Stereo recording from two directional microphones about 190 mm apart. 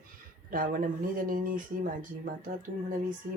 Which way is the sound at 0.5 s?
45° right (ahead or behind).